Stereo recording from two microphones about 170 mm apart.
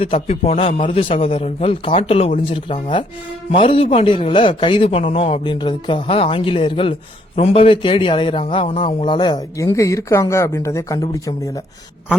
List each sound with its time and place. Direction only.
0.0 s a man's voice: 35° left (ahead or behind); by 11.3 s 20° left (ahead or behind)